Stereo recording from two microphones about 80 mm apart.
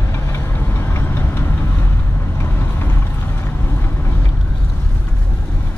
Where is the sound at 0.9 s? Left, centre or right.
Left.